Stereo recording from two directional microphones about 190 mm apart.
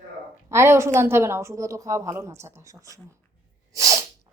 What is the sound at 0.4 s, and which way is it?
A woman's voice, 15° right (ahead or behind).